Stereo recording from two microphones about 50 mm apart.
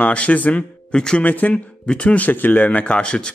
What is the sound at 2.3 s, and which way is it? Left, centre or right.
Speech, left.